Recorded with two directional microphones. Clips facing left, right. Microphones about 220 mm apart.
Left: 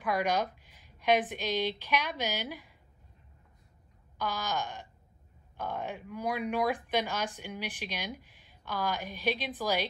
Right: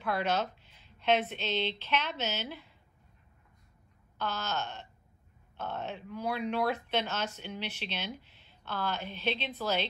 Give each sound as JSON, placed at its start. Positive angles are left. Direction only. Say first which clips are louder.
{"t": 0.0, "sound": "speech", "louder": "left 1 dB", "side_deg": 15}
{"t": 4.2, "sound": "speech", "louder": "left 1 dB", "side_deg": 15}